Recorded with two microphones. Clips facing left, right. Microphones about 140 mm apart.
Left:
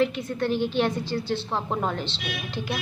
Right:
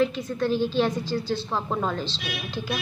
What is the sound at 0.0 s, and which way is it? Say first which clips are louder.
Speech: even; 65° left (ahead or behind).